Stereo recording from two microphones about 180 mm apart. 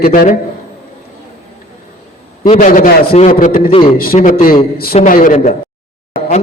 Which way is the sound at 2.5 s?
50° left (ahead or behind).